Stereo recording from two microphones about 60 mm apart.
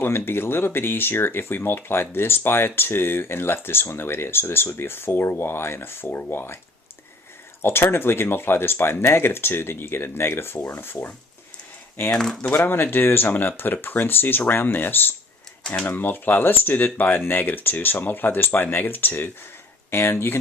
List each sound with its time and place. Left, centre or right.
0.0 s speech: left
7.6 s speech: left
12.1 s speech: centre
12.5 s speech: left